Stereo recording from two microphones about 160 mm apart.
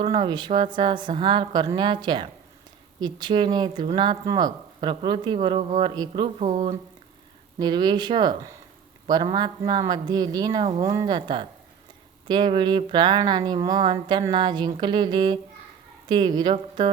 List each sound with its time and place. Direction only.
0.0 s speech: 30° right (ahead or behind)
5.9 s speech: 25° right (ahead or behind)
6.2 s speech: 40° right (ahead or behind)
7.6 s speech: 25° right (ahead or behind)